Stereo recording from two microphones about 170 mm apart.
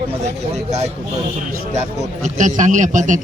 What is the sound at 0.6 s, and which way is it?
Speech, 40° right (ahead or behind).